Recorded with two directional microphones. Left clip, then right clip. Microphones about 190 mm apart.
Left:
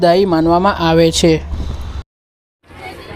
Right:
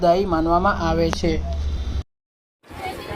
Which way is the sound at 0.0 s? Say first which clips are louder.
Left 7 dB; 60° left (ahead or behind).